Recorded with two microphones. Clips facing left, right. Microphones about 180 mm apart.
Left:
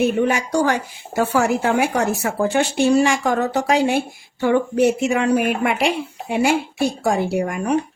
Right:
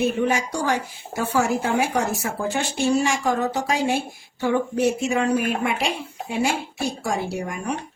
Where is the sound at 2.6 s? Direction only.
70° left (ahead or behind).